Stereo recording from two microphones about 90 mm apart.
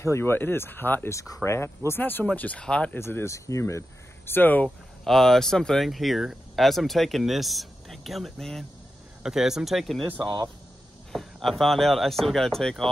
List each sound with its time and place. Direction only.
0.0 s speech: 30° left (ahead or behind)
1.1 s speech: 35° left (ahead or behind); by 3.0 s 10° left (ahead or behind)
3.0 s speech: 30° left (ahead or behind)
4.3 s speech: 20° left (ahead or behind)
5.0 s speech: 5° left (ahead or behind)
10.1 s speech: 55° right (ahead or behind)
11.1 s speech: centre (ahead or behind)